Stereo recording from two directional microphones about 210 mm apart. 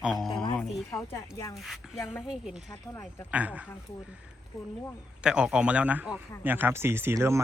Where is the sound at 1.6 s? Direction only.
Centre (ahead or behind).